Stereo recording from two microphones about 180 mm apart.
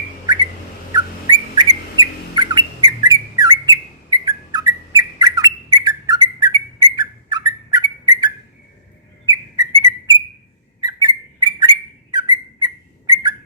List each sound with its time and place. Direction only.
0.3 s bird: 20° right (ahead or behind)
1.5 s bird: 25° right (ahead or behind)
9.3 s whistle: 20° right (ahead or behind)
10.8 s a sound: 20° right (ahead or behind)
12.1 s bird: 20° right (ahead or behind)